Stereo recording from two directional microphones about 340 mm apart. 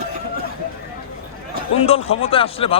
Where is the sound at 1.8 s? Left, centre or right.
Centre.